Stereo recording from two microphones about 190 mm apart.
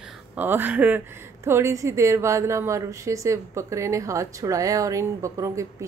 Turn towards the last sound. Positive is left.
turn(degrees=-15)  # may be behind; listen again after turning